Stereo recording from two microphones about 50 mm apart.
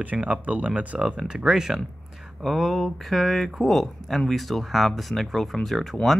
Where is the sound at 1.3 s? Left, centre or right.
Centre.